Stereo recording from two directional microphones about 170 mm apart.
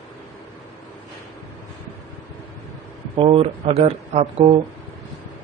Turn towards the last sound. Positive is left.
turn(degrees=-35)  # may be behind; listen again after turning